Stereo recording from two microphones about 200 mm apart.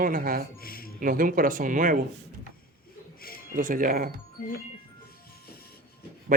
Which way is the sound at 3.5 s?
45° right (ahead or behind).